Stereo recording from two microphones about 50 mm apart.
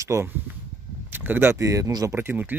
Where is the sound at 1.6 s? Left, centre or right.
Right.